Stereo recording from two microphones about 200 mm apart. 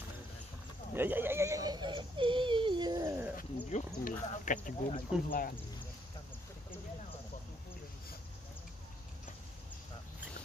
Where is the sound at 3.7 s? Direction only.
40° left (ahead or behind).